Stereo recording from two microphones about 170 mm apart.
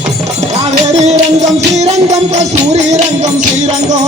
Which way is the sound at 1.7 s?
40° right (ahead or behind).